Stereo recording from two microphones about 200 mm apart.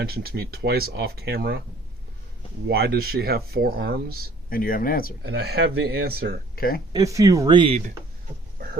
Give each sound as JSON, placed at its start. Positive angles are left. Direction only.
{"t": 0.0, "sound": "speech", "side_deg": -50}
{"t": 2.6, "sound": "speech", "side_deg": -55}
{"t": 4.4, "sound": "speech", "side_deg": 45}
{"t": 5.2, "sound": "speech", "side_deg": -55}
{"t": 6.6, "sound": "speech", "side_deg": 45}
{"t": 6.9, "sound": "speech", "side_deg": -15}